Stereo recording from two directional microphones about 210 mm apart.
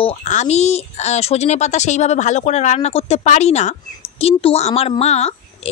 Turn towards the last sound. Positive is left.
turn(degrees=30)  # may be behind; listen again after turning